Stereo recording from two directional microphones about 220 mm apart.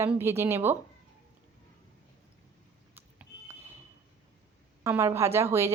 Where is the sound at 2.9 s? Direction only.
10° right (ahead or behind).